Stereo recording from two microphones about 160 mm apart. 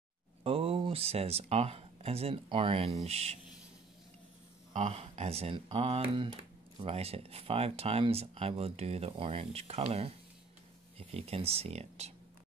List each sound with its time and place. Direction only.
0.4 s speech: 35° right (ahead or behind)
4.7 s speech: 45° right (ahead or behind)